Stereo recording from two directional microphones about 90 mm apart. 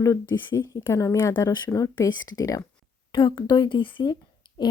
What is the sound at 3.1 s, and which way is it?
Speech, 65° left (ahead or behind).